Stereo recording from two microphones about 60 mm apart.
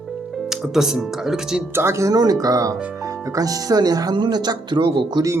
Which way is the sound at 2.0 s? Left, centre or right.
Right.